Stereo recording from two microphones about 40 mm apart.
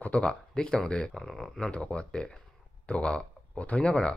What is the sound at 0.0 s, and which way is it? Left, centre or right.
Speech, left.